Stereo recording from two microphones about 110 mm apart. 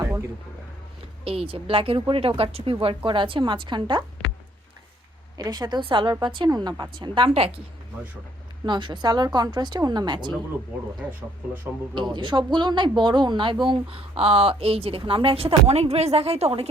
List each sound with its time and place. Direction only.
1.2 s speech: 60° right (ahead or behind)
2.8 s a woman's voice: 50° right (ahead or behind)
5.4 s a woman's voice: 40° right (ahead or behind); by 7.6 s 60° right (ahead or behind)
8.6 s a woman's voice: 45° right (ahead or behind)
11.0 s speech: 15° right (ahead or behind)
12.1 s a woman's voice: 45° right (ahead or behind); by 16.6 s 65° right (ahead or behind)